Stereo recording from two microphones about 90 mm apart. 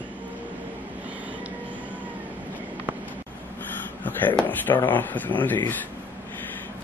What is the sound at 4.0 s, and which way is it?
Speech, 20° left (ahead or behind).